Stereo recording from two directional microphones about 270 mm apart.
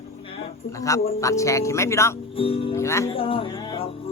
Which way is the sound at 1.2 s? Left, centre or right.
Centre.